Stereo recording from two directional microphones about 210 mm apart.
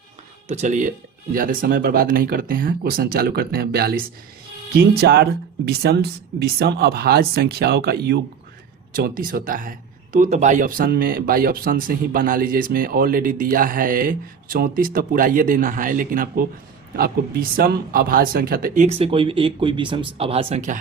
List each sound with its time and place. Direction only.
0.4 s speech: 35° right (ahead or behind)
17.6 s speech: 45° right (ahead or behind)